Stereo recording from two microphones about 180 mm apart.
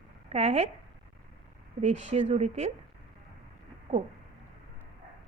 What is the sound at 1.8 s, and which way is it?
Speech, 40° right (ahead or behind).